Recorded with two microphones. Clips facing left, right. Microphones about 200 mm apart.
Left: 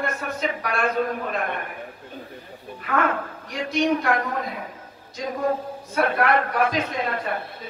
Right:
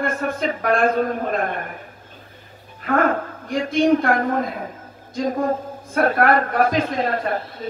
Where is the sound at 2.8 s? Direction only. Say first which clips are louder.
Right 5 dB; 40° right (ahead or behind).